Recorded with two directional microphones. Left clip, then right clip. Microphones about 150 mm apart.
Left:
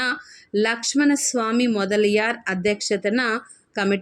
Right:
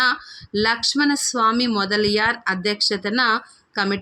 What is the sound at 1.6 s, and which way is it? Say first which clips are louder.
Speech: even; 20° left (ahead or behind).